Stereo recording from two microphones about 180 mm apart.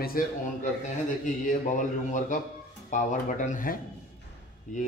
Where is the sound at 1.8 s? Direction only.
45° left (ahead or behind).